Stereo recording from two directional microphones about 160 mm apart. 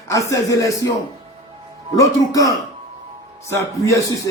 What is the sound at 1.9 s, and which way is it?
Speech, 20° left (ahead or behind).